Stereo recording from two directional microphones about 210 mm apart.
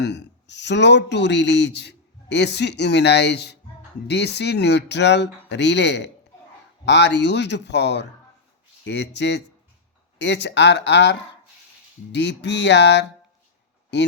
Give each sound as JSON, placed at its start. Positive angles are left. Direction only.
{"t": 0.0, "sound": "speech", "side_deg": 55}